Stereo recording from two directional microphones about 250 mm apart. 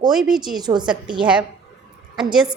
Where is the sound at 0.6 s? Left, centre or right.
Centre.